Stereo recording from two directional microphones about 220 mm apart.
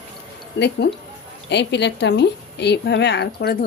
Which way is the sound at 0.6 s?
55° left (ahead or behind).